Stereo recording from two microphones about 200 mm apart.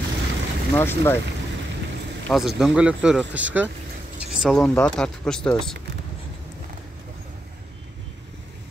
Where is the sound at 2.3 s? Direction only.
Centre (ahead or behind).